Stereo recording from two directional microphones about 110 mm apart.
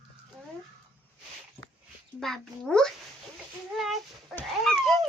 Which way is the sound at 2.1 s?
5° left (ahead or behind).